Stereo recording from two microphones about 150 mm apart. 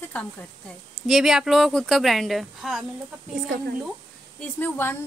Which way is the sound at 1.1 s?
5° right (ahead or behind).